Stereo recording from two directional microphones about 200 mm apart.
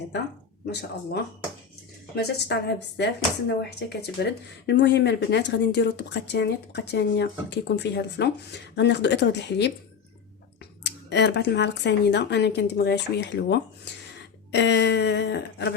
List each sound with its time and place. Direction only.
0.7 s speech: 55° left (ahead or behind)
10.8 s speech: 60° left (ahead or behind)